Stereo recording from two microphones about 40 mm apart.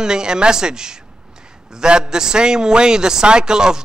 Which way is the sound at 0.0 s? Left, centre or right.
Centre.